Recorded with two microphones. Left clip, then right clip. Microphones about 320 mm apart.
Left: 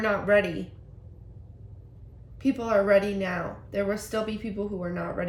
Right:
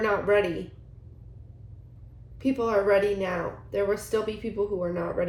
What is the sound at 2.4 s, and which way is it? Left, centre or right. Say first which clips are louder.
Speech: even; centre.